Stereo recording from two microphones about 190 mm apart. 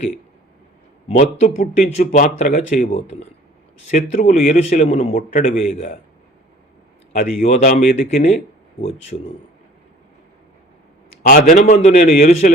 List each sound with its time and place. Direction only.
1.0 s speech: 40° left (ahead or behind)
7.4 s speech: 40° left (ahead or behind)
9.1 s speech: 35° left (ahead or behind)
11.3 s speech: 45° left (ahead or behind)